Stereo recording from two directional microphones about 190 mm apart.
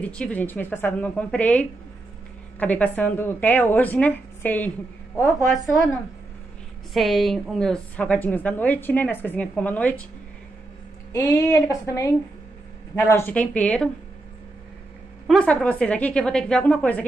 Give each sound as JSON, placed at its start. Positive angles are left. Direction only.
{"t": 0.0, "sound": "a woman's voice", "side_deg": 5}
{"t": 5.4, "sound": "a woman's voice", "side_deg": 0}
{"t": 6.9, "sound": "a woman's voice", "side_deg": 0}
{"t": 11.1, "sound": "a woman's voice", "side_deg": 20}
{"t": 13.1, "sound": "a woman's voice", "side_deg": 10}
{"t": 15.2, "sound": "a woman's voice", "side_deg": 5}